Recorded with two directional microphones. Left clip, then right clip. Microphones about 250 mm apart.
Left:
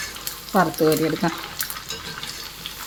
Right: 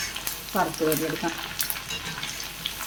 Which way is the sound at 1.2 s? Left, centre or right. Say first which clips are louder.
Left 5 dB; left.